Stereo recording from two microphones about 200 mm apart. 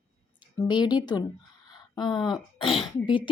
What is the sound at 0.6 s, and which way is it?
A woman's voice, 20° left (ahead or behind).